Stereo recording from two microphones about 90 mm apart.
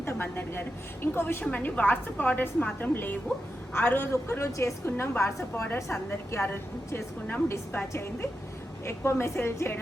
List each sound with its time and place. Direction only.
0.0 s a woman's voice: 25° left (ahead or behind)